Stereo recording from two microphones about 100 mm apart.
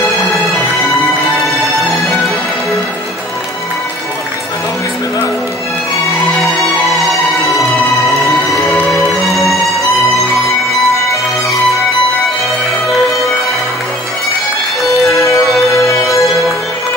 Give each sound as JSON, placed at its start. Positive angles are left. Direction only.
{"t": 6.4, "sound": "music", "side_deg": 0}
{"t": 9.3, "sound": "music", "side_deg": 0}
{"t": 15.0, "sound": "music", "side_deg": 30}